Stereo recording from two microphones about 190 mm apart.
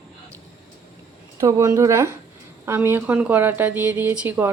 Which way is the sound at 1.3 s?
15° right (ahead or behind).